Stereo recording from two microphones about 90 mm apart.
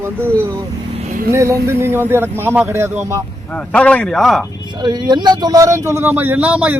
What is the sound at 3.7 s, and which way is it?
Speech, 15° left (ahead or behind).